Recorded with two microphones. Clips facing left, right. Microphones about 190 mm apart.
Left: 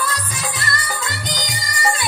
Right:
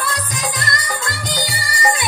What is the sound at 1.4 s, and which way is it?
Music, 10° right (ahead or behind).